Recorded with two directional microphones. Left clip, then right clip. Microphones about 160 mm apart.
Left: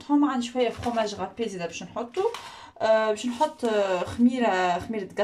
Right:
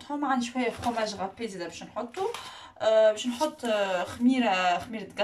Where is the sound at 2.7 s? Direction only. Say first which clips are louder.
Right 1 dB; 30° left (ahead or behind).